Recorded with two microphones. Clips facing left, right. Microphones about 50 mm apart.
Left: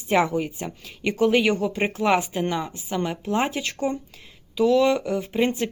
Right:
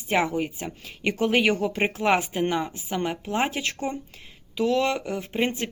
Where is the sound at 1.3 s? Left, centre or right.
Right.